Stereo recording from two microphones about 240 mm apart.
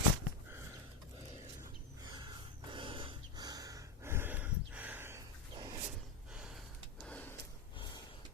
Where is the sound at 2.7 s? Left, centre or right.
Right.